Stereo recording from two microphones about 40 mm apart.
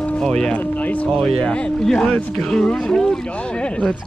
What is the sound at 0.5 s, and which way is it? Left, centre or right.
Speech, left.